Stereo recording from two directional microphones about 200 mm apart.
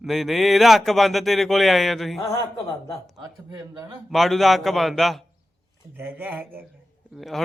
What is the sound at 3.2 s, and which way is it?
Speech, 15° right (ahead or behind).